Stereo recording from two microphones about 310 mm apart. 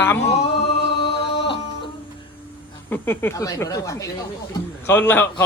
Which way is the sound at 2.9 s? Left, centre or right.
Centre.